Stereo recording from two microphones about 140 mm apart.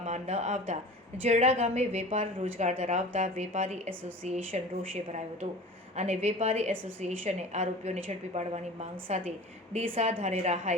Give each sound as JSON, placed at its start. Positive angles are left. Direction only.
{"t": 0.0, "sound": "a woman's voice", "side_deg": -55}
{"t": 6.0, "sound": "a woman's voice", "side_deg": -50}